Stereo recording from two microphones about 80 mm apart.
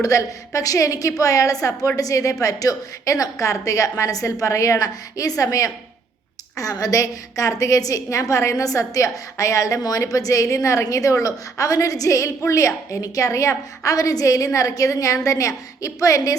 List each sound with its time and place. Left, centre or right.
0.0 s a woman's voice: left